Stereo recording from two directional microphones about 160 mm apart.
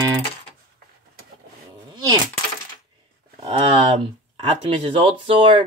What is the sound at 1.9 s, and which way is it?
Coin, 25° right (ahead or behind).